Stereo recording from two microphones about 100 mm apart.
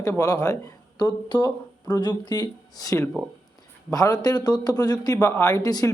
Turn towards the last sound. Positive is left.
turn(degrees=35)  # may be behind; listen again after turning